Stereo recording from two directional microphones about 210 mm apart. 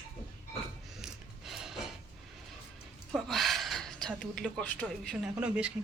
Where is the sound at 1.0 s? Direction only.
Centre (ahead or behind).